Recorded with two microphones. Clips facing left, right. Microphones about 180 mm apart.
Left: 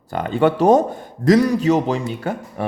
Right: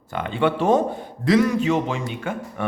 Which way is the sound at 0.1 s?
40° left (ahead or behind).